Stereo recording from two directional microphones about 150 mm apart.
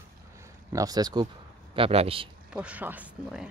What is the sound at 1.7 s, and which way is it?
Speech, 40° right (ahead or behind).